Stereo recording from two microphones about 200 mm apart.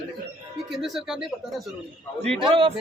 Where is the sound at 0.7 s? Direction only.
Centre (ahead or behind).